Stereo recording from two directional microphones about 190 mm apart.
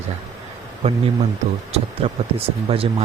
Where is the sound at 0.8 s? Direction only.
35° right (ahead or behind).